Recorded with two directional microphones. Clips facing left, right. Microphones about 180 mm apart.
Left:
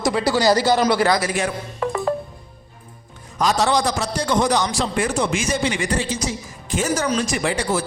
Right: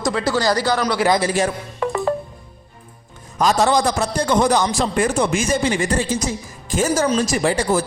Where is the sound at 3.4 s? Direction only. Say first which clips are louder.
Right 2 dB; 45° right (ahead or behind).